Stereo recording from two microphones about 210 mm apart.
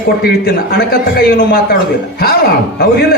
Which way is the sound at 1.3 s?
45° left (ahead or behind).